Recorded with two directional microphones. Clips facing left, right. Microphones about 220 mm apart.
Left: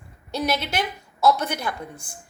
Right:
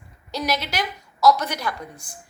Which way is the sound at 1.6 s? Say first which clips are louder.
Even; 25° left (ahead or behind).